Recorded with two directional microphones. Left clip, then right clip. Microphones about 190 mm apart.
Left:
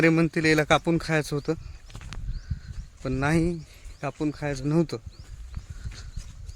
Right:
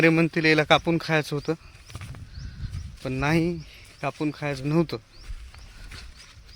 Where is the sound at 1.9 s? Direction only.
65° right (ahead or behind).